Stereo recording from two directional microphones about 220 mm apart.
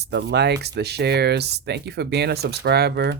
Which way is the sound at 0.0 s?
50° right (ahead or behind).